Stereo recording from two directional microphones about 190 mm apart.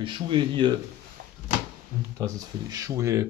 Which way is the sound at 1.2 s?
60° right (ahead or behind).